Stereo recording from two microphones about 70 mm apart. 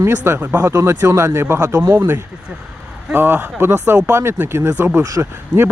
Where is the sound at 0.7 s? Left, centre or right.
Right.